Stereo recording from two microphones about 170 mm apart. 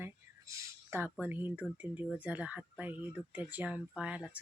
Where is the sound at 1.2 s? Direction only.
10° right (ahead or behind).